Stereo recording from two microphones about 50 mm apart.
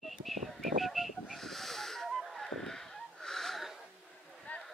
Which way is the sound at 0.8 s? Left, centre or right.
Centre.